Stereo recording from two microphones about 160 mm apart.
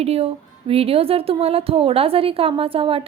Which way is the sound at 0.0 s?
40° right (ahead or behind).